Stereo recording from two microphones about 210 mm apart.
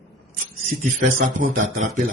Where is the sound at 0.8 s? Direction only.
40° right (ahead or behind).